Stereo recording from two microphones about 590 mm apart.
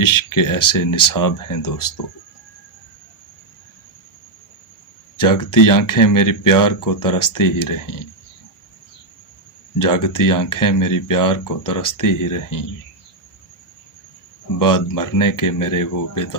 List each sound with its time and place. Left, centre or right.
0.0 s speech: left
5.1 s speech: left
9.7 s speech: left
14.6 s speech: left